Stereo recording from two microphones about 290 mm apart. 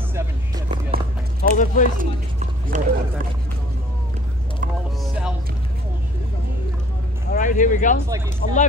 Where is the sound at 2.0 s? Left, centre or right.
Right.